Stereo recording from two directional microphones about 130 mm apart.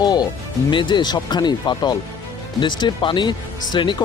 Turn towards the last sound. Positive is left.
turn(degrees=35)  # may be behind; listen again after turning